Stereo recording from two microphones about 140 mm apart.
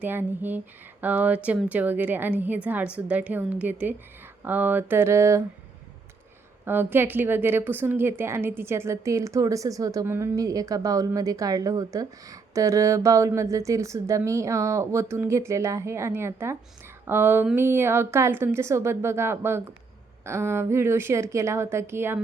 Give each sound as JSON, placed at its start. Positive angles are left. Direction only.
{"t": 0.0, "sound": "a woman's voice", "side_deg": -15}
{"t": 6.7, "sound": "a woman's voice", "side_deg": -15}